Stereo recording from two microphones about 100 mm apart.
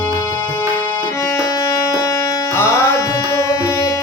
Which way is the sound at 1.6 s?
30° left (ahead or behind).